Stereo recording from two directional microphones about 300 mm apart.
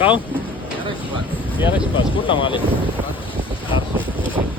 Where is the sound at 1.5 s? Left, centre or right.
Centre.